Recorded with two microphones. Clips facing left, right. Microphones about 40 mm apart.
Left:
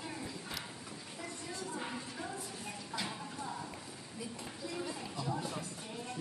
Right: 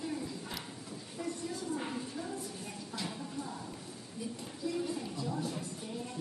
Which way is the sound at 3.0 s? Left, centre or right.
Centre.